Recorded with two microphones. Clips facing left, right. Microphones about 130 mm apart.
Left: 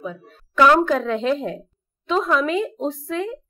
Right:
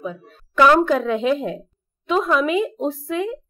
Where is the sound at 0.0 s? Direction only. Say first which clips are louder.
Right 2 dB; 5° right (ahead or behind).